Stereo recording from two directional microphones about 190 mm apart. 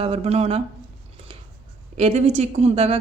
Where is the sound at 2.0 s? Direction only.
35° right (ahead or behind).